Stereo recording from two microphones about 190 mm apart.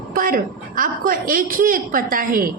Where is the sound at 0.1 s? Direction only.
45° right (ahead or behind).